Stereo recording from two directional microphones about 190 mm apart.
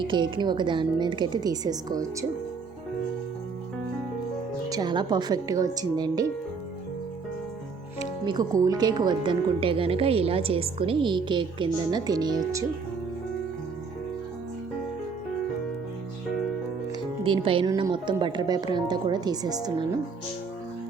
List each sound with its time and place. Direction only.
0.0 s speech: 25° right (ahead or behind)
4.7 s speech: 20° right (ahead or behind)
8.2 s speech: 20° right (ahead or behind)
17.2 s speech: 25° right (ahead or behind)